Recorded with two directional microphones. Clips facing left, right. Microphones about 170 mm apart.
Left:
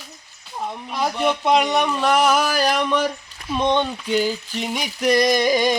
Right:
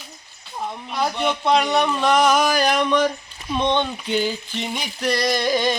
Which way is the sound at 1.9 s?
5° left (ahead or behind).